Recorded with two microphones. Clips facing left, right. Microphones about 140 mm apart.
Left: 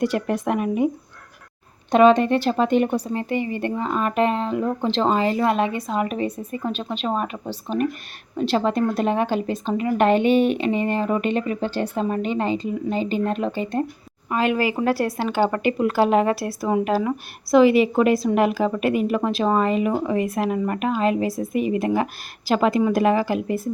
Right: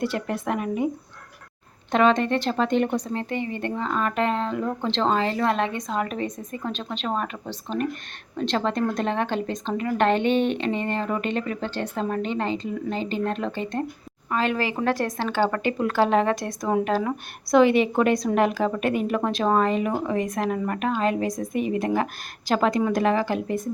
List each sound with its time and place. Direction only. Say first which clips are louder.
0.0 s speech: left 4 dB; 15° left (ahead or behind)
1.9 s speech: left 5 dB; 15° left (ahead or behind)